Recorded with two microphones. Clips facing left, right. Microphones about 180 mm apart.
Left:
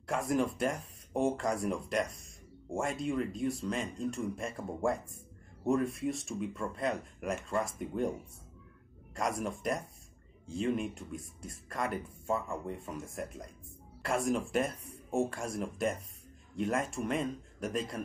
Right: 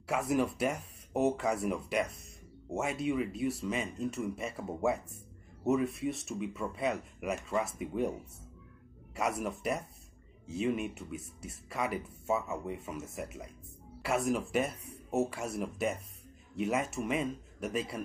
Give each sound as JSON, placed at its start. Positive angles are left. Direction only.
{"t": 0.0, "sound": "speech", "side_deg": -5}
{"t": 9.4, "sound": "speech", "side_deg": -5}